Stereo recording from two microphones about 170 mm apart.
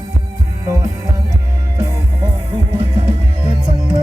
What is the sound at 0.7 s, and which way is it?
Music, 20° right (ahead or behind).